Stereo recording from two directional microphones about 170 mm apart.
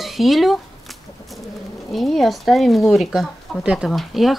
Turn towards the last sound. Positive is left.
turn(degrees=0)  # may be behind; listen again after turning